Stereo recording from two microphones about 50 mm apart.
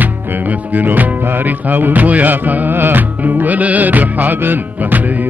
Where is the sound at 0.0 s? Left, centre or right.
Right.